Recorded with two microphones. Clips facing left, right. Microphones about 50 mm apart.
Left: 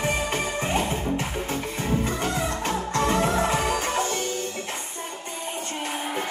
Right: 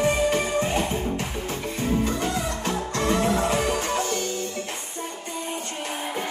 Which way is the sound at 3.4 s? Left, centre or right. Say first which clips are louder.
Right 1 dB; left.